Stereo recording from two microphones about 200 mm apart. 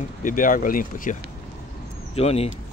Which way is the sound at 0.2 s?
40° left (ahead or behind).